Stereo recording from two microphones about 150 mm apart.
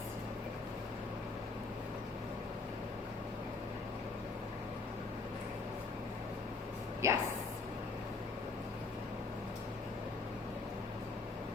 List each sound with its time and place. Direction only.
7.0 s speech: 20° right (ahead or behind)